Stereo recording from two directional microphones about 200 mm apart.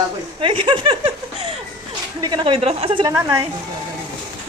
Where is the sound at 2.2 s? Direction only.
25° right (ahead or behind).